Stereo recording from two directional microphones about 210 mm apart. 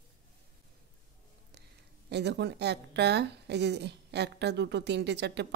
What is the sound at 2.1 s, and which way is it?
A woman's voice, 55° right (ahead or behind).